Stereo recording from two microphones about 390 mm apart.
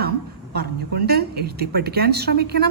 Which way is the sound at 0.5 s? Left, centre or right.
Right.